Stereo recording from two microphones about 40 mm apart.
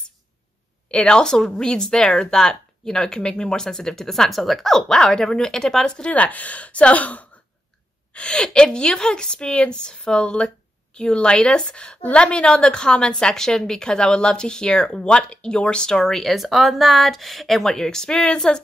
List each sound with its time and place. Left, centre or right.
0.9 s a woman's voice: left
6.0 s a woman's voice: left
8.1 s a woman's voice: left
16.3 s speech: centre
17.7 s speech: centre